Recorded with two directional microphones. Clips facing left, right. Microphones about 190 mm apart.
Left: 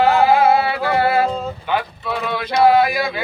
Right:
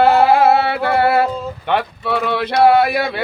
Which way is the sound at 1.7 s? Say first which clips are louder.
Right 5 dB; 65° right (ahead or behind).